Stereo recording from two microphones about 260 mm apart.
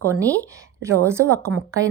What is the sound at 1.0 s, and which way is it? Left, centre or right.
Speech, centre.